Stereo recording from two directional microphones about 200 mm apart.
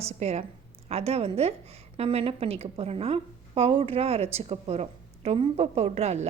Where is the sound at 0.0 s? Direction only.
35° right (ahead or behind).